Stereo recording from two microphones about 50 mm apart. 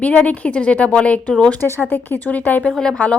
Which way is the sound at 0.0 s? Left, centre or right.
Left.